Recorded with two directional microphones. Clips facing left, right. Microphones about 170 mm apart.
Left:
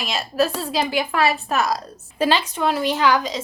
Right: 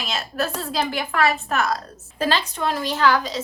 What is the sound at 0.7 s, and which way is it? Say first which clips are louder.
A child's voice: left 3 dB; 15° left (ahead or behind).